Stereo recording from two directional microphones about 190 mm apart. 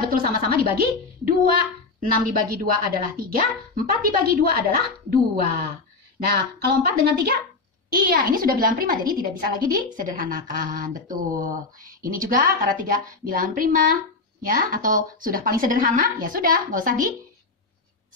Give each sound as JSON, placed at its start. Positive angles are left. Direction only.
{"t": 0.0, "sound": "speech", "side_deg": -50}
{"t": 6.3, "sound": "speech", "side_deg": -55}